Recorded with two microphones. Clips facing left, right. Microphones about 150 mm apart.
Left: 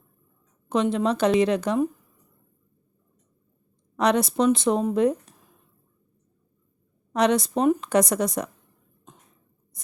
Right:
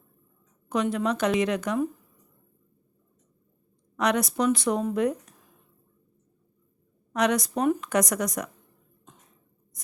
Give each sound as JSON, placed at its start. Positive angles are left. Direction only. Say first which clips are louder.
{"t": 0.7, "sound": "a woman's voice", "louder": "left 3 dB", "side_deg": 25}
{"t": 3.9, "sound": "a woman's voice", "louder": "left 4 dB", "side_deg": 30}
{"t": 7.1, "sound": "a woman's voice", "louder": "left 3 dB", "side_deg": 30}